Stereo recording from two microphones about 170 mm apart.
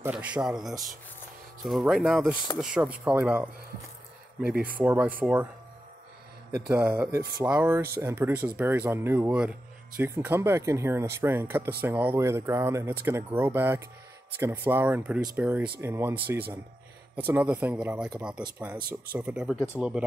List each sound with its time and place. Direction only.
0.0 s speech: 10° right (ahead or behind)
6.7 s speech: 10° right (ahead or behind)